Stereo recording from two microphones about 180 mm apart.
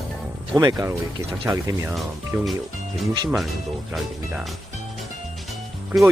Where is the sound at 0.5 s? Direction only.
20° right (ahead or behind).